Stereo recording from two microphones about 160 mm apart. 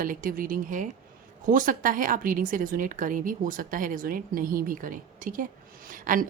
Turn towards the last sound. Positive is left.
turn(degrees=-60)  # may be behind; listen again after turning